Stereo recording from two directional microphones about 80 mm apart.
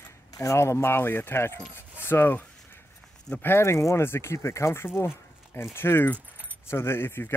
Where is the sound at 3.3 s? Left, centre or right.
Left.